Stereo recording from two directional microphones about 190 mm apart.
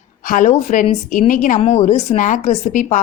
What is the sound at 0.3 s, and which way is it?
A woman's voice, 40° left (ahead or behind).